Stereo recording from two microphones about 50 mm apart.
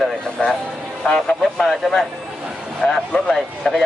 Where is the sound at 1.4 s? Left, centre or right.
Centre.